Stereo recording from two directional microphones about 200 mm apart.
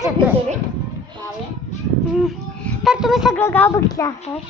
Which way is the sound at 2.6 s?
Centre (ahead or behind).